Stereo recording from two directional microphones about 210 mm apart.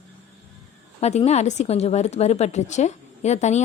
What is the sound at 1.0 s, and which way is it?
A woman's voice, 30° left (ahead or behind).